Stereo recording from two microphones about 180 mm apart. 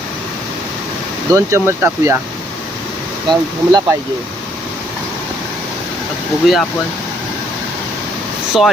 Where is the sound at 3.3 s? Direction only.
25° right (ahead or behind).